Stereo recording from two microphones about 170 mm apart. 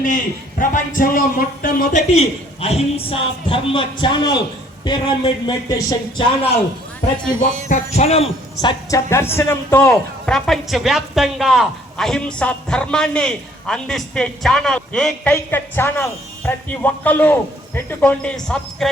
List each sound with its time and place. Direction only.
0.6 s speech: 55° left (ahead or behind)
2.1 s a man's voice: 35° left (ahead or behind); by 6.0 s 20° left (ahead or behind)
6.1 s a man's voice: 35° left (ahead or behind)
7.9 s a man's voice: 35° left (ahead or behind)
8.9 s speech: 15° left (ahead or behind)
10.2 s a woman's voice: 5° left (ahead or behind)